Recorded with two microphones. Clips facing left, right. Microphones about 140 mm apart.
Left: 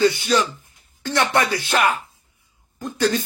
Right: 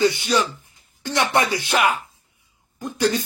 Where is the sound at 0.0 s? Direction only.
15° right (ahead or behind).